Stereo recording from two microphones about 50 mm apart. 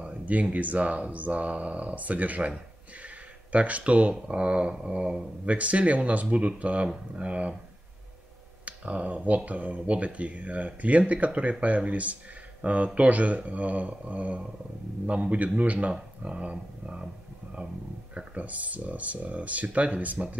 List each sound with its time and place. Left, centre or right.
0.0 s speech: right
3.5 s speech: right
4.7 s a sound: centre
5.4 s speech: right
8.6 s speech: right
18.1 s speech: right